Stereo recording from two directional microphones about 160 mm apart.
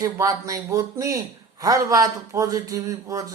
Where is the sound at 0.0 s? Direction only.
20° right (ahead or behind).